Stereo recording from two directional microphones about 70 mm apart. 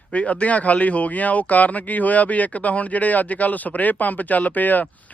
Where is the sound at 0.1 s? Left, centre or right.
Centre.